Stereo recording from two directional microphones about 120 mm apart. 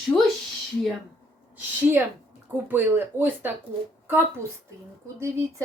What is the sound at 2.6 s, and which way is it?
Speech, 15° right (ahead or behind).